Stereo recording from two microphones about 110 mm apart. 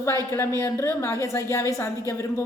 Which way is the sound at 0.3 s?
25° left (ahead or behind).